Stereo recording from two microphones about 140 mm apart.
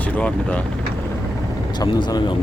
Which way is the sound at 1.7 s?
30° left (ahead or behind).